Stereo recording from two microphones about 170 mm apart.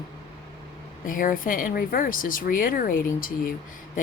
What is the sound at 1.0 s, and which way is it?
Speech, 55° left (ahead or behind).